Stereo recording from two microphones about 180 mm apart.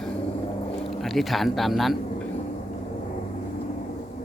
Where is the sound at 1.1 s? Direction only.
Centre (ahead or behind).